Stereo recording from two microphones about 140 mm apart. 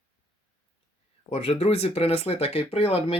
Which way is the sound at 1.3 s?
45° left (ahead or behind).